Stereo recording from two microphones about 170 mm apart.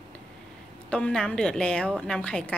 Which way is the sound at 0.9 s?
5° left (ahead or behind).